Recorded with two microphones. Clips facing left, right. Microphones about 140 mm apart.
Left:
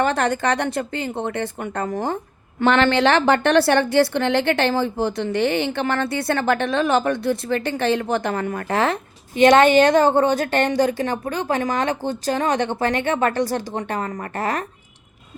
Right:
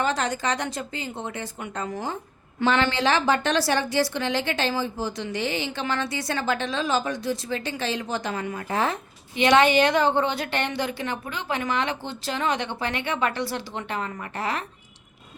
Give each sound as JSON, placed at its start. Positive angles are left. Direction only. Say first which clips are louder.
{"t": 0.0, "sound": "a woman's voice", "louder": "left 5 dB", "side_deg": 60}
{"t": 9.3, "sound": "a woman's voice", "louder": "left 6 dB", "side_deg": 45}